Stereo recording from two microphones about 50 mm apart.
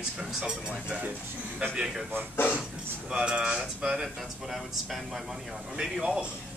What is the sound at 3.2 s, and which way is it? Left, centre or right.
Speech, centre.